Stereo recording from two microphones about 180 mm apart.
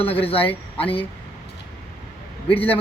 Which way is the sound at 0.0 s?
30° left (ahead or behind).